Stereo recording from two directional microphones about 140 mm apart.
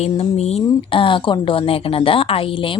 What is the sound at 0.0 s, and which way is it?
A woman's voice, 50° left (ahead or behind).